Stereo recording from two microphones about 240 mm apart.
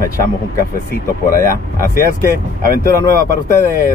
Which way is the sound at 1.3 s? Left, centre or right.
Left.